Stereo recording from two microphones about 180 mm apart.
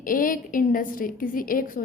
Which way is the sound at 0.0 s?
50° left (ahead or behind).